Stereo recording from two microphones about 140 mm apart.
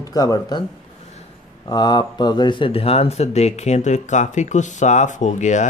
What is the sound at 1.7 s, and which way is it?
Speech, 30° left (ahead or behind).